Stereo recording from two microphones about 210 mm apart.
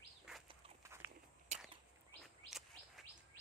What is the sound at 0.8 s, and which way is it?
Dog, 10° right (ahead or behind).